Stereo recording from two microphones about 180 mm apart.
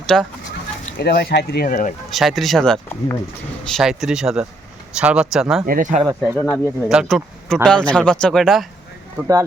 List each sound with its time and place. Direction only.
0.1 s speech: centre (ahead or behind)
0.9 s speech: 60° left (ahead or behind)
2.0 s speech: centre (ahead or behind)
5.6 s speech: 50° right (ahead or behind)
6.3 s speech: 5° left (ahead or behind)